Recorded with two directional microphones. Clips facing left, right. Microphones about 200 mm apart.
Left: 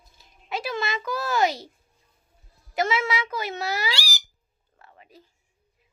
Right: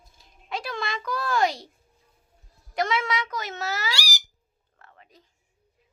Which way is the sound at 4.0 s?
15° right (ahead or behind).